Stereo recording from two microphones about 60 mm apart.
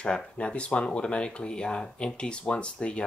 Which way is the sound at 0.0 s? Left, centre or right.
Centre.